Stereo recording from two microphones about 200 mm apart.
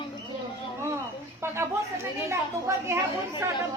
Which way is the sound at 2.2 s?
15° right (ahead or behind).